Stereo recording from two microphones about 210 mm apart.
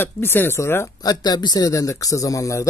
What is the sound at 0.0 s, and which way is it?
Speech, 10° left (ahead or behind).